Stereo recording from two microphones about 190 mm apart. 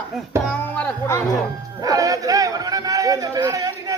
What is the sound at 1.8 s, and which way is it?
A man's voice, 20° right (ahead or behind).